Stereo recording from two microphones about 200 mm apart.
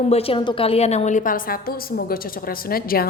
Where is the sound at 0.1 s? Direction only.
30° left (ahead or behind).